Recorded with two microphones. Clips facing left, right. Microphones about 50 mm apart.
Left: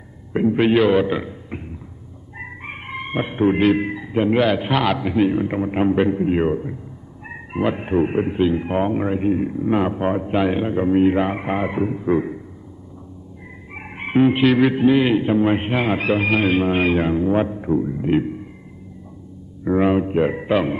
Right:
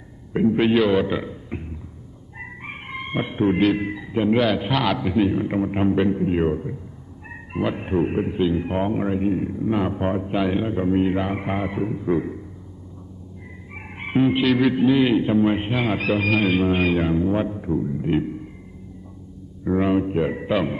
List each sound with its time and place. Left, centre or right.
0.3 s a man's voice: centre
13.9 s speech: centre
19.6 s speech: centre